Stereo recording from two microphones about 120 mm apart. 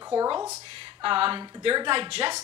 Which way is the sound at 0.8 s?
45° right (ahead or behind).